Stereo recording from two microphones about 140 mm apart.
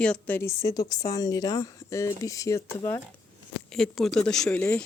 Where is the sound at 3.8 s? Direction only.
5° left (ahead or behind).